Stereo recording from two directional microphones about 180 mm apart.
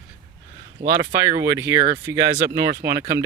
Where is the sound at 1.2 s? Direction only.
15° right (ahead or behind).